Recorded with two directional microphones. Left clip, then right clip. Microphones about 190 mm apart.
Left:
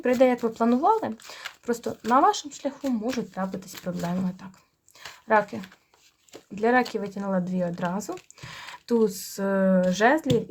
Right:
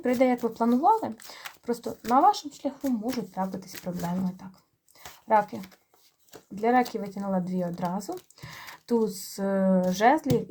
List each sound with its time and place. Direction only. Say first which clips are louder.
0.1 s speech: left 3 dB; 25° left (ahead or behind)